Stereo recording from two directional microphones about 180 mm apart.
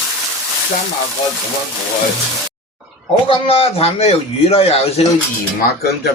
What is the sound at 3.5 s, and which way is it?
A man's voice, 30° left (ahead or behind).